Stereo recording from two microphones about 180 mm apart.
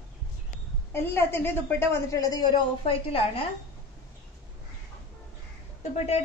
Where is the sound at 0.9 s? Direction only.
10° left (ahead or behind); by 3.4 s 30° left (ahead or behind).